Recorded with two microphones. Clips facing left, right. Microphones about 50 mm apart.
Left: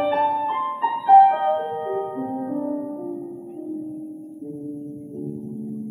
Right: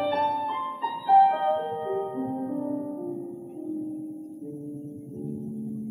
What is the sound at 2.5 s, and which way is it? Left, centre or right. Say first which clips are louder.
Music: left 4 dB; left.